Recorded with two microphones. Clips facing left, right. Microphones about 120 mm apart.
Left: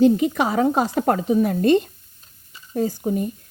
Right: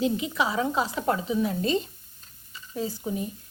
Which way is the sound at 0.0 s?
50° left (ahead or behind).